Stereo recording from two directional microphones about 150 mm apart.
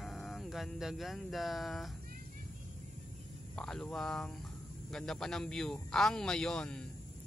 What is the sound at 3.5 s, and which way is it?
A man's voice, 5° left (ahead or behind).